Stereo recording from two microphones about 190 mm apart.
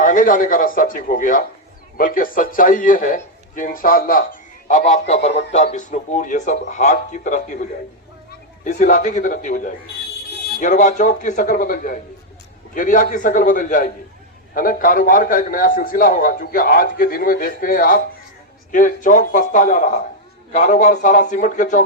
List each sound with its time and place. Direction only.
0.0 s a man's voice: 45° left (ahead or behind)
8.6 s a man's voice: 45° left (ahead or behind)